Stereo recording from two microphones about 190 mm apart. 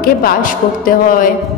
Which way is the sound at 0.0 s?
50° left (ahead or behind).